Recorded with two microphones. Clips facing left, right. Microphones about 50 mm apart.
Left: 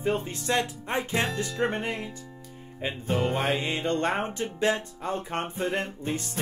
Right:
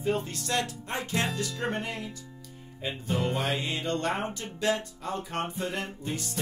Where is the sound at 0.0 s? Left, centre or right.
Left.